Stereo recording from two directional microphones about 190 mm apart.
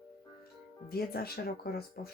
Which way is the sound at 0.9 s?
50° left (ahead or behind).